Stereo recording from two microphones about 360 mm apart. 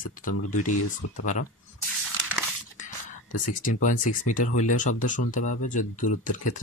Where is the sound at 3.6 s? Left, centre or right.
Left.